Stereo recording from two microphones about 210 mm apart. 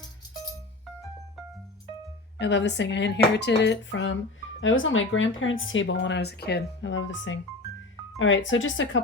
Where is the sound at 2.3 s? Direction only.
55° left (ahead or behind).